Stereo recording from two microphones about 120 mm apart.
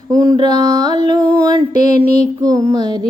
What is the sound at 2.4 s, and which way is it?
Music, 30° right (ahead or behind).